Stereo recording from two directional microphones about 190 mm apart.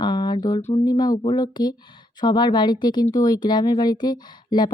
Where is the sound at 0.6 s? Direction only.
35° left (ahead or behind).